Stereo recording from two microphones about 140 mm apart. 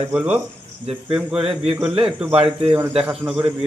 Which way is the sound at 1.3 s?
45° right (ahead or behind).